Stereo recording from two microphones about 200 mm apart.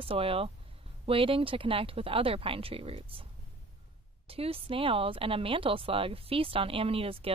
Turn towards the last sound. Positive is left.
turn(degrees=-30)  # may be behind; listen again after turning